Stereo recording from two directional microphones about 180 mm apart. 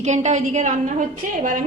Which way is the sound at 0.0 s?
40° right (ahead or behind).